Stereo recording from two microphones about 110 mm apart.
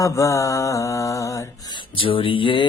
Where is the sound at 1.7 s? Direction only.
55° left (ahead or behind).